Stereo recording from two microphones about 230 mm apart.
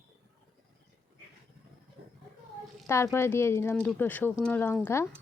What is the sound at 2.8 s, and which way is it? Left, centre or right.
Speech, centre.